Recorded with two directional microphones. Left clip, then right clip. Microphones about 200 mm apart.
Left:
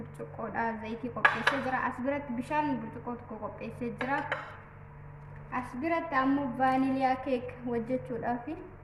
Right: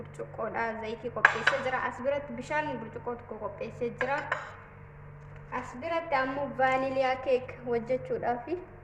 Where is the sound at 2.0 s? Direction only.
30° right (ahead or behind).